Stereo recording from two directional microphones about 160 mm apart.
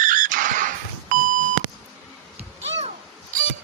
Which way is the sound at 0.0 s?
55° right (ahead or behind).